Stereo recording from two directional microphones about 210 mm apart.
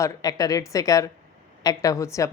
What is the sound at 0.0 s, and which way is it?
A woman's voice, 15° left (ahead or behind).